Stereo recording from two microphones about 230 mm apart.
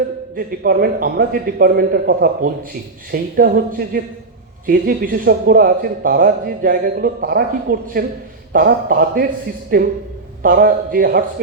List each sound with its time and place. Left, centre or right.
0.3 s a man's voice: right